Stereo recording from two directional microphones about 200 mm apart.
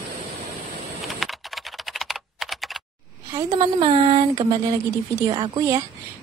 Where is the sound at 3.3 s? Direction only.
20° right (ahead or behind).